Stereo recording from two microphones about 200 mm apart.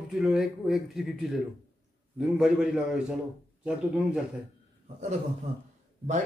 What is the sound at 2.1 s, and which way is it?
Speech, centre (ahead or behind).